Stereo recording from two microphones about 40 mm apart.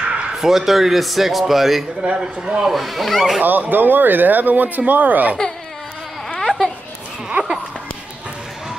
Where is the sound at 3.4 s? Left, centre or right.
Right.